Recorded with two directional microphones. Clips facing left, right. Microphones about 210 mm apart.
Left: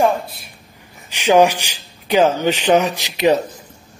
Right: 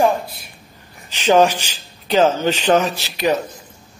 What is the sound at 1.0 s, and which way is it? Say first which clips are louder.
Speech: left 1 dB; 15° left (ahead or behind).